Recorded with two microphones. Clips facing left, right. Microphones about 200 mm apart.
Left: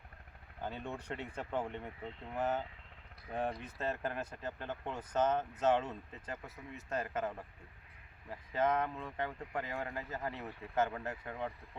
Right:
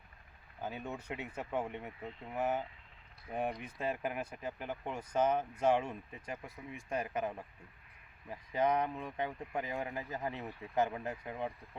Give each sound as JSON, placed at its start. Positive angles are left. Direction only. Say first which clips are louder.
{"t": 0.6, "sound": "speech", "louder": "even", "side_deg": -5}